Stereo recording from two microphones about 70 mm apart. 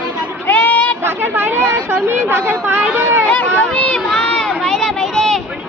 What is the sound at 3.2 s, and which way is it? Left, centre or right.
Speech, left.